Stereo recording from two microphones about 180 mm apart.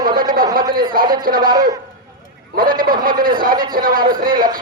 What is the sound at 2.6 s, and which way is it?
Speech, 50° right (ahead or behind).